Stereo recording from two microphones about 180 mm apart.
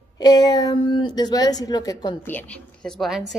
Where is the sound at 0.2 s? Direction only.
20° left (ahead or behind).